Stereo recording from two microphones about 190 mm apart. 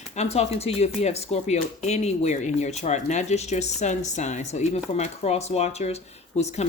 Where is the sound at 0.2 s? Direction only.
35° left (ahead or behind).